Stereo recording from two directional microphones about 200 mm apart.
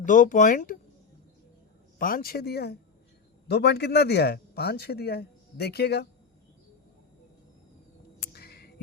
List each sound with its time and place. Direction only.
0.0 s speech: 40° left (ahead or behind)
2.0 s a man's voice: 45° left (ahead or behind)
8.3 s a sound: 50° left (ahead or behind)